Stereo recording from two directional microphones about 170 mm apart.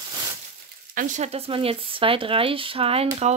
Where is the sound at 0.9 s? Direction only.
50° right (ahead or behind).